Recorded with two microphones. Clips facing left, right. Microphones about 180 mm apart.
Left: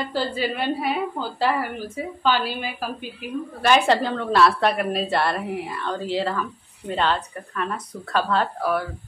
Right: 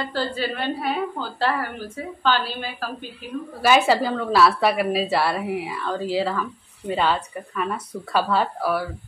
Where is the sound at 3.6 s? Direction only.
5° right (ahead or behind).